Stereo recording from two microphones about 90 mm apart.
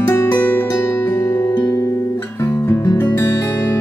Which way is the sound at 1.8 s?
30° left (ahead or behind).